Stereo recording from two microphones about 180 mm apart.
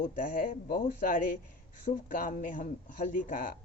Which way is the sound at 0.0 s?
50° left (ahead or behind).